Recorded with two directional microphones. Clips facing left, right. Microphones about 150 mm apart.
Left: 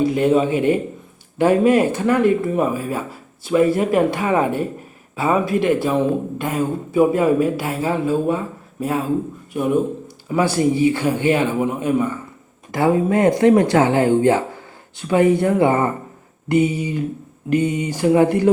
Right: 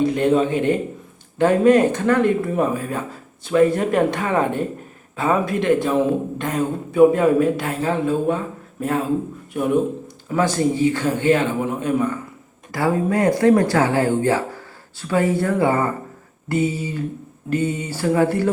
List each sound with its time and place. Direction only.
0.0 s speech: 5° left (ahead or behind)
12.7 s speech: 20° left (ahead or behind)